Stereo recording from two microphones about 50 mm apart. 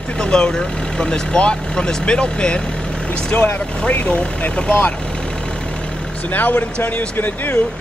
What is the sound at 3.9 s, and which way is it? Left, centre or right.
Speech, left.